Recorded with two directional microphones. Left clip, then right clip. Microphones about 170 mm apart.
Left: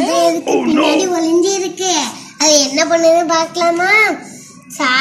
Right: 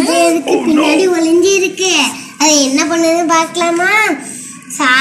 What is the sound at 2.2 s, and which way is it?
Babbling, 20° right (ahead or behind).